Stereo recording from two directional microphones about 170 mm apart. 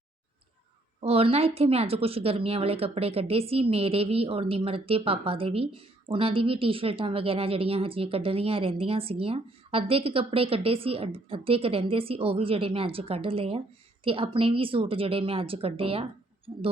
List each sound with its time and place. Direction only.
1.0 s speech: 35° right (ahead or behind)